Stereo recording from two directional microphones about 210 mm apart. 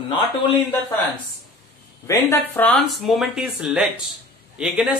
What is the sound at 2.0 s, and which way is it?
A man's voice, 10° left (ahead or behind).